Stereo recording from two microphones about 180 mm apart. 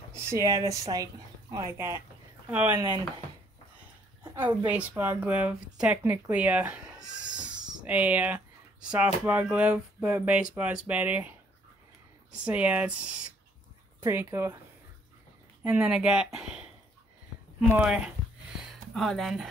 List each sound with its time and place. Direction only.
0.1 s speech: 15° right (ahead or behind)
4.5 s speech: 10° right (ahead or behind)
12.4 s speech: 5° right (ahead or behind)
15.6 s speech: 5° right (ahead or behind)
18.6 s a sound: centre (ahead or behind)